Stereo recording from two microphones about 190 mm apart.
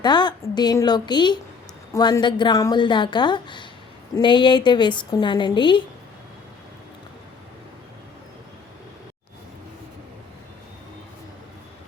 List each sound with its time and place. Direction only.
0.0 s a woman's voice: 25° left (ahead or behind)